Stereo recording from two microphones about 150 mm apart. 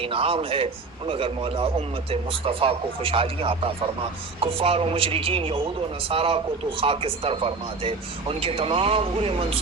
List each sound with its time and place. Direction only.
0.0 s a man's voice: 40° right (ahead or behind)